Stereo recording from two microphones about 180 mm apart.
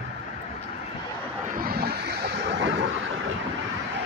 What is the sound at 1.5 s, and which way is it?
Vehicle, 55° right (ahead or behind).